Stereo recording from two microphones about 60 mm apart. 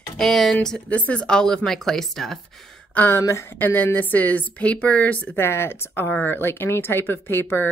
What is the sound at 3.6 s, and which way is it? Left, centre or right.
Speech, left.